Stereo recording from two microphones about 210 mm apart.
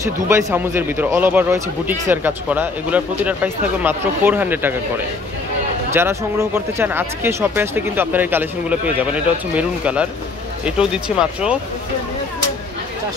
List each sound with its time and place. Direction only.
0.3 s speech: 10° right (ahead or behind)